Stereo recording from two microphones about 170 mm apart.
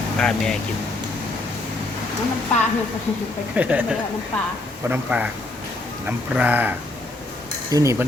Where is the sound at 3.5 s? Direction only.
10° right (ahead or behind).